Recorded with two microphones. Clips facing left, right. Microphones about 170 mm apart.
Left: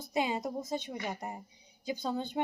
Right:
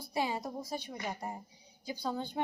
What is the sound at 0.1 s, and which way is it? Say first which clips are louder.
A woman's voice: left 3 dB; 20° left (ahead or behind).